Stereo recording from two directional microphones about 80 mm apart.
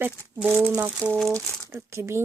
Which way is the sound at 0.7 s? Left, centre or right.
Right.